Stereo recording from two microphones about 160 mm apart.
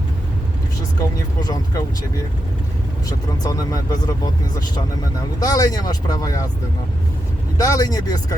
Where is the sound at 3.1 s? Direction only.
25° left (ahead or behind).